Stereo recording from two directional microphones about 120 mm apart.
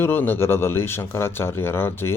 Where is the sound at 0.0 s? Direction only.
20° left (ahead or behind).